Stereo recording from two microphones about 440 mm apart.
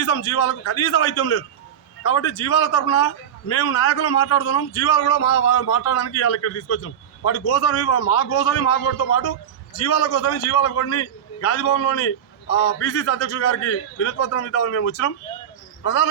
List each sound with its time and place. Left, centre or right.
0.0 s a man's voice: left